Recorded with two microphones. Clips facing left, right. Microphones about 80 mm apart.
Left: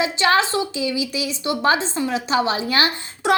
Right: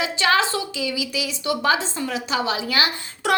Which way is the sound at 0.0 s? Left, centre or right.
Left.